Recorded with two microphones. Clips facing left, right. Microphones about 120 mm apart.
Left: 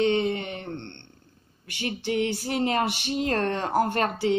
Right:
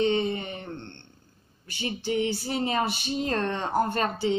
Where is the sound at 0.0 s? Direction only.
55° left (ahead or behind).